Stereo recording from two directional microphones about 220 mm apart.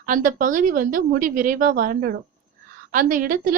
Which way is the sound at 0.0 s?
35° right (ahead or behind).